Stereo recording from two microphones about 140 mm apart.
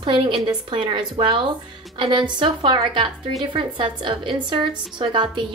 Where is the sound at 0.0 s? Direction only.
35° right (ahead or behind).